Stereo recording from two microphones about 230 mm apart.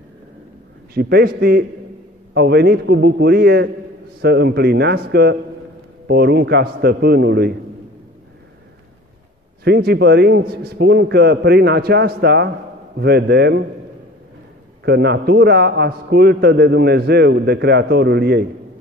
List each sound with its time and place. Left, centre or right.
0.9 s a man's voice: right
9.7 s a man's voice: right
14.9 s a man's voice: right